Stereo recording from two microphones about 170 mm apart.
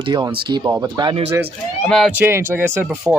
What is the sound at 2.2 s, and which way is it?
Speech, 15° right (ahead or behind).